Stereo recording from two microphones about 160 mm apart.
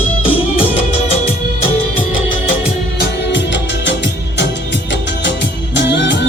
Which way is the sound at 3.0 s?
90° left.